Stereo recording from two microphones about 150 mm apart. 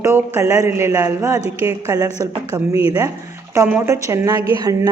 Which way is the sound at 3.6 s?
15° right (ahead or behind).